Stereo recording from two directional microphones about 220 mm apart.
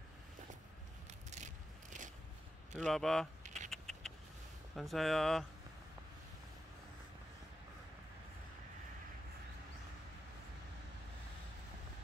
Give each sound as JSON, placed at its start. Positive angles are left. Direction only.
{"t": 1.3, "sound": "vehicle", "side_deg": -35}
{"t": 2.8, "sound": "speech", "side_deg": 0}
{"t": 3.4, "sound": "typing", "side_deg": -35}
{"t": 3.7, "sound": "typing", "side_deg": 0}
{"t": 4.7, "sound": "speech", "side_deg": 0}